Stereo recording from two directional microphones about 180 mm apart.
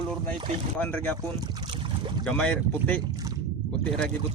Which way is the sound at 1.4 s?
25° right (ahead or behind).